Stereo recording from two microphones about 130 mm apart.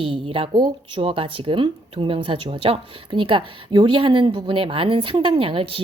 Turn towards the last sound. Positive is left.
turn(degrees=-45)  # may be behind; listen again after turning